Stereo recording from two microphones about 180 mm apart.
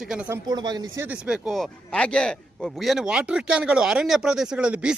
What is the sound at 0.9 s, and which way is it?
A man's voice, 10° right (ahead or behind).